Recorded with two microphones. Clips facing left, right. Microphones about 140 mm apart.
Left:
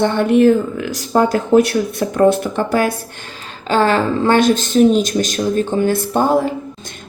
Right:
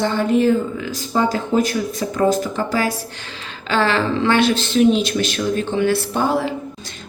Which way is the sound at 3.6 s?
45° left (ahead or behind).